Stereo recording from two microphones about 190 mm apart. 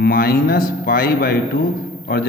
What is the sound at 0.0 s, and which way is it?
A man's voice, 50° left (ahead or behind).